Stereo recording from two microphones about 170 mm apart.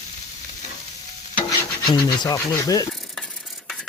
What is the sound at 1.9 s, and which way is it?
Speech, 25° left (ahead or behind).